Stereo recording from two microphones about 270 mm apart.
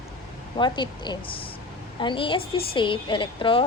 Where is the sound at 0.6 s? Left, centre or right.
Centre.